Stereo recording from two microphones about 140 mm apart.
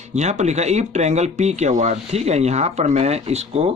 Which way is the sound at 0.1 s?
55° right (ahead or behind).